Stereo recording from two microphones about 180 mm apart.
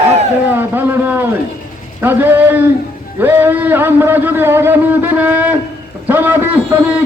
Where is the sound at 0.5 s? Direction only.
10° right (ahead or behind).